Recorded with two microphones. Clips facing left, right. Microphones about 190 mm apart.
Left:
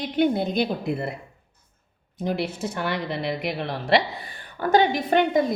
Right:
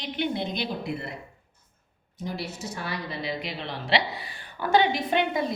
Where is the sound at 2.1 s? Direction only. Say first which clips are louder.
Left 7 dB; 55° left (ahead or behind).